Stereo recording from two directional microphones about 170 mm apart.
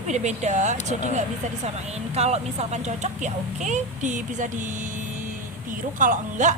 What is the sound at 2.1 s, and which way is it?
A woman's voice, 40° right (ahead or behind).